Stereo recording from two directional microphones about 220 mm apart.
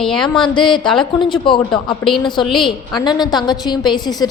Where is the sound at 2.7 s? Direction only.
20° left (ahead or behind).